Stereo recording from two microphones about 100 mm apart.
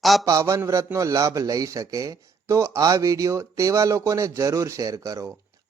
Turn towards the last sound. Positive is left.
turn(degrees=-35)  # may be behind; listen again after turning